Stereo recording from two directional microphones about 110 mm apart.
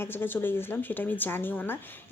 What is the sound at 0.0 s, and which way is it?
Speech, 20° left (ahead or behind).